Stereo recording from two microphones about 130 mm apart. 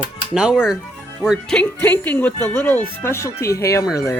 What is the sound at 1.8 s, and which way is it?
Speech, 15° left (ahead or behind).